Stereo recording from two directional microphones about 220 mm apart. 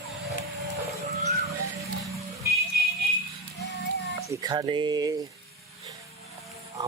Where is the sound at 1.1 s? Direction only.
30° right (ahead or behind).